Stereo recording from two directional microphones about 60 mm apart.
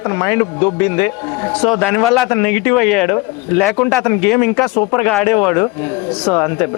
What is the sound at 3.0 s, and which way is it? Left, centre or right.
Speech, left.